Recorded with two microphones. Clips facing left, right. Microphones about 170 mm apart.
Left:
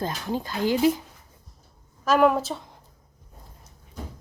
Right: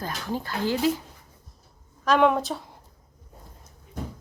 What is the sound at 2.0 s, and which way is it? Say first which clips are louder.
Speech: left 1 dB; 5° left (ahead or behind).